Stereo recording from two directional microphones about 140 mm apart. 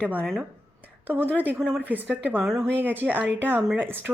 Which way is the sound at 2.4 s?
Centre (ahead or behind).